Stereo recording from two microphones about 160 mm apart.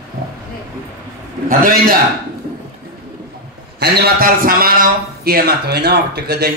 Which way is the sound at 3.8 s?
85° right.